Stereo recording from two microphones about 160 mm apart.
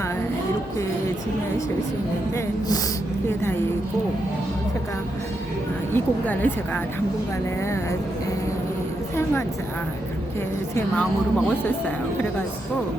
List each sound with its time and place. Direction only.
2.3 s speech: 25° left (ahead or behind)
5.9 s a woman's voice: 10° left (ahead or behind)